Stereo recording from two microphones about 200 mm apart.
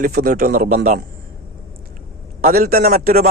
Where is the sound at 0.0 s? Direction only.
50° right (ahead or behind).